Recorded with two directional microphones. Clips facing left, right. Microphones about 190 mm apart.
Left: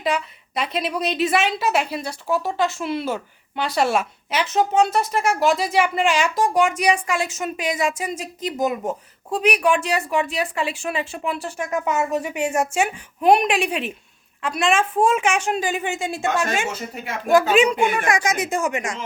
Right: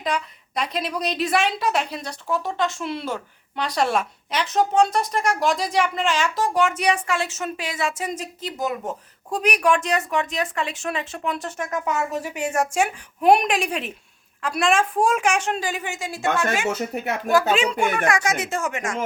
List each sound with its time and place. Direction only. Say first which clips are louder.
0.0 s a woman's voice: left 3 dB; 5° left (ahead or behind)
15.6 s speech: left 4 dB; 25° left (ahead or behind)
17.3 s speech: left 5 dB; 15° left (ahead or behind)